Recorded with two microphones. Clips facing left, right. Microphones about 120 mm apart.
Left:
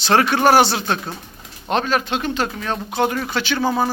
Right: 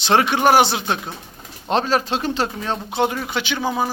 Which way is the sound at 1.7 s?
30° right (ahead or behind).